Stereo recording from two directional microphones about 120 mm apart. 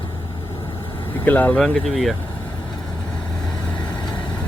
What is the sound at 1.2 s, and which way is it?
Speech, 15° left (ahead or behind).